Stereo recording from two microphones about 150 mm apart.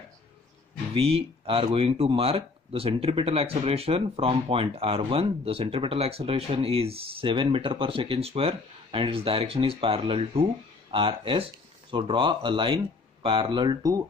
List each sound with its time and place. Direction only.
0.9 s speech: 40° right (ahead or behind)